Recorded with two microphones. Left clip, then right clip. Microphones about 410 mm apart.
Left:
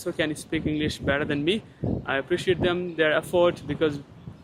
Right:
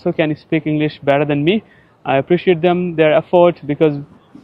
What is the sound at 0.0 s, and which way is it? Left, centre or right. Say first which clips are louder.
Speech: right 10 dB; right.